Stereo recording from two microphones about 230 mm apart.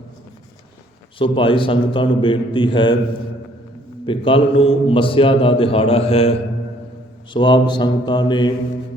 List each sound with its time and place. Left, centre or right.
1.2 s a man's voice: left
4.0 s a man's voice: left
7.3 s a man's voice: centre